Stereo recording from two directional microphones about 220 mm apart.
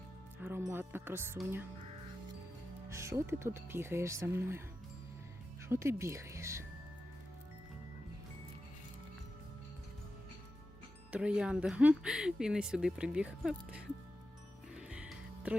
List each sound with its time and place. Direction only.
0.3 s speech: 10° right (ahead or behind)
2.9 s speech: 10° right (ahead or behind)
5.6 s speech: 10° right (ahead or behind)
11.1 s speech: 5° right (ahead or behind)
14.8 s music: 5° right (ahead or behind)